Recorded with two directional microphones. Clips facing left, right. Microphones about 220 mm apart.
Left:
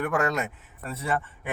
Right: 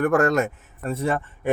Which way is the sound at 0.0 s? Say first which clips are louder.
Right 7 dB; 45° right (ahead or behind).